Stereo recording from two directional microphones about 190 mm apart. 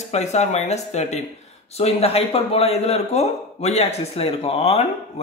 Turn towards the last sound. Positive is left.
turn(degrees=30)  # may be behind; listen again after turning